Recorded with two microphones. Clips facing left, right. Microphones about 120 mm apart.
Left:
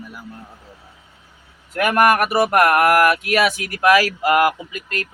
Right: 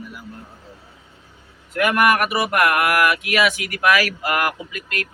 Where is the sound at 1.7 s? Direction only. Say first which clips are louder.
Left 2 dB; 40° left (ahead or behind); by 4.5 s 25° left (ahead or behind).